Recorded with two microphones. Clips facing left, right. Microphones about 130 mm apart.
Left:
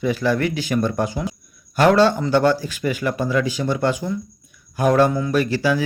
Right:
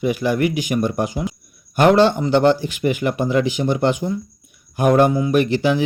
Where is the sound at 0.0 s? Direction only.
15° right (ahead or behind).